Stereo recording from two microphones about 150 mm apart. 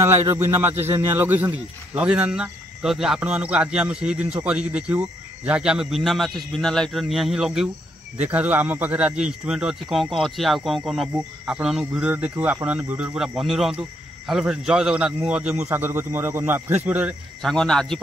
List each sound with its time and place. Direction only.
0.0 s speech: 20° right (ahead or behind)
15.7 s speech: 15° right (ahead or behind)
17.4 s speech: 5° left (ahead or behind)